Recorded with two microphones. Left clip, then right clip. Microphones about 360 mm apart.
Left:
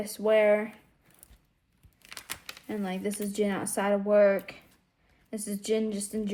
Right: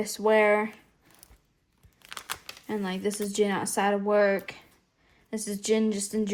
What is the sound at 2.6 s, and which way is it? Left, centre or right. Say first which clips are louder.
Speech: right 3 dB; right.